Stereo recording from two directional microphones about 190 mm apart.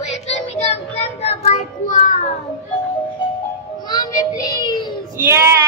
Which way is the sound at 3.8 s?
20° left (ahead or behind).